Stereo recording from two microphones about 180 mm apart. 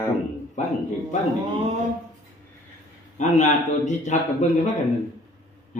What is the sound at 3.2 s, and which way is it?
A man's voice, 40° left (ahead or behind).